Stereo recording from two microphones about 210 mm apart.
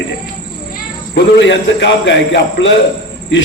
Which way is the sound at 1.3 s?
60° left (ahead or behind).